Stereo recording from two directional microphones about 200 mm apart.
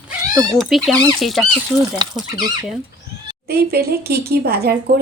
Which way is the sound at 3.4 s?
50° right (ahead or behind).